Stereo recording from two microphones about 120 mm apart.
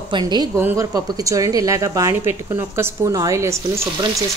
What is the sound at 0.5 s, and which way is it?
Speech, 20° right (ahead or behind).